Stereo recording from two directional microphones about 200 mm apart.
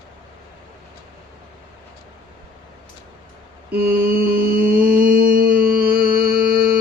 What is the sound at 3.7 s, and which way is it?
Mantra, 50° right (ahead or behind).